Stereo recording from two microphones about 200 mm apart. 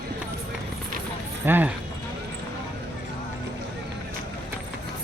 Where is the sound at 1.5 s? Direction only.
10° right (ahead or behind).